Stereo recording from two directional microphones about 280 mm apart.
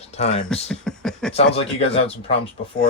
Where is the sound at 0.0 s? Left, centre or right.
Left.